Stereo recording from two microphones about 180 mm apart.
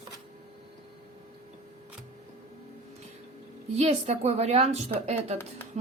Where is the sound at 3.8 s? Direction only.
35° right (ahead or behind).